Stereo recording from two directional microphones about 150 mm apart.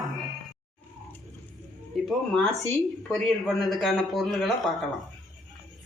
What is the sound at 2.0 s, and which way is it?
A man's voice, centre (ahead or behind).